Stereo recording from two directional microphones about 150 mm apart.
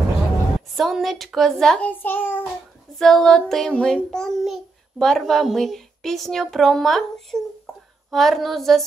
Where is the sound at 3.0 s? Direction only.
Centre (ahead or behind).